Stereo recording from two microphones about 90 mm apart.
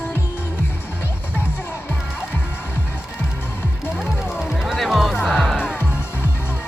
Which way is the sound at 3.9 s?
5° right (ahead or behind).